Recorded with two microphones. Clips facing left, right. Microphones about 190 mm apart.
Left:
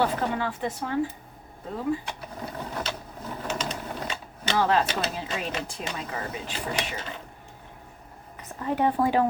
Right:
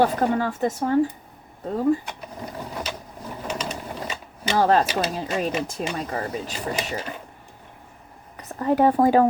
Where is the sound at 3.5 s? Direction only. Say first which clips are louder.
Right 2 dB; 5° right (ahead or behind).